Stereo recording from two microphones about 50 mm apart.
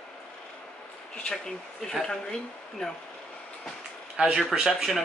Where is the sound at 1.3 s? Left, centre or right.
Centre.